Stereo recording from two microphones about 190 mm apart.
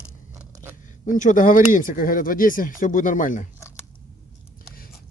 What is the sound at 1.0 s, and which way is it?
Speech, 45° left (ahead or behind).